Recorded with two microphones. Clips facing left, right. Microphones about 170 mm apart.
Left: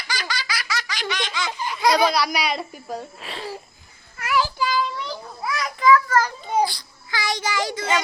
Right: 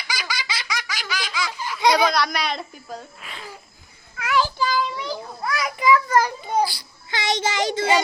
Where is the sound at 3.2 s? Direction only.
30° left (ahead or behind).